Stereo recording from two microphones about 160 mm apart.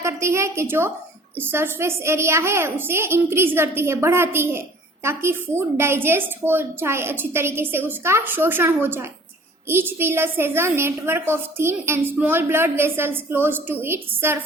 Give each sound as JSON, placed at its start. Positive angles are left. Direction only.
{"t": 0.0, "sound": "a woman's voice", "side_deg": -15}